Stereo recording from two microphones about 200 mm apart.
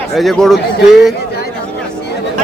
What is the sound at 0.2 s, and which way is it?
Speech, centre (ahead or behind).